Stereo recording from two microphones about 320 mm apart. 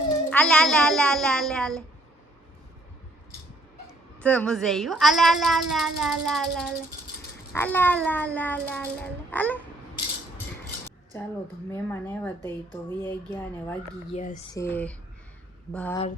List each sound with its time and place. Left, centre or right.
0.3 s speech: centre
4.2 s speech: centre
11.7 s speech: centre
14.1 s speech: left
14.5 s speech: centre